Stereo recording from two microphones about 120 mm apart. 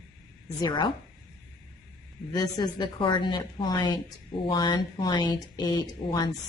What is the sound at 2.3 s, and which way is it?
Speech, 35° left (ahead or behind).